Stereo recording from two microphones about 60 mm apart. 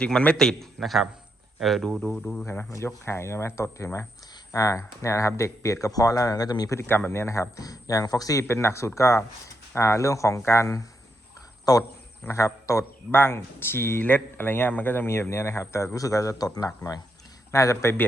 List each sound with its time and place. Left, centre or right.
0.0 s speech: centre
0.3 s speech: centre
2.3 s speech: left
2.8 s speech: left
4.5 s speech: left
6.7 s speech: left
7.1 s speech: left
8.4 s speech: left
11.7 s speech: left
12.3 s speech: left
13.1 s speech: left
15.0 s speech: left
16.0 s speech: left
17.5 s speech: left